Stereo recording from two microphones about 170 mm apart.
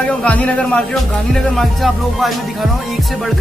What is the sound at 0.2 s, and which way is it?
Speech, 5° left (ahead or behind).